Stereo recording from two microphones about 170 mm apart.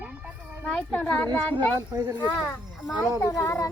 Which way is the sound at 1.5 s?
20° right (ahead or behind).